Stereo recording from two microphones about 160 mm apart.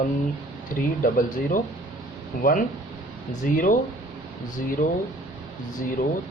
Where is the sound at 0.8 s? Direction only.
60° left (ahead or behind).